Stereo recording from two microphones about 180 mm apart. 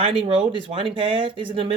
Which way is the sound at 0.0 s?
30° right (ahead or behind).